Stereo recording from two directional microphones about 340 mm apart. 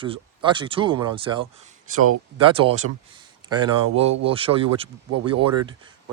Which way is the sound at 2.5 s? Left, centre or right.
Centre.